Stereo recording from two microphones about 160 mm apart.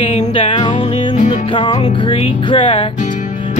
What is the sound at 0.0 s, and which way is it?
Music, 35° left (ahead or behind).